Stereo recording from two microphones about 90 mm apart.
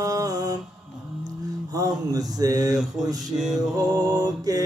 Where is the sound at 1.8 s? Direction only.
45° right (ahead or behind).